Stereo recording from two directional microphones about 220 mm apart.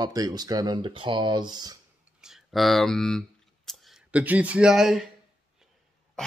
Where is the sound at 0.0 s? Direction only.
15° right (ahead or behind).